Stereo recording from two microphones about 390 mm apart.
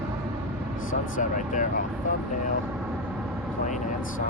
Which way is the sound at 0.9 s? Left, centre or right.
Centre.